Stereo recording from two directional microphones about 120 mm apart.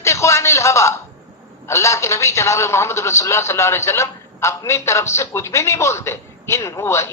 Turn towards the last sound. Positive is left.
turn(degrees=20)  # may be behind; listen again after turning